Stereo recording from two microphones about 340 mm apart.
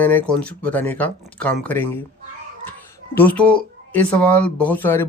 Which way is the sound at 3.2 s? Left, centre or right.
Centre.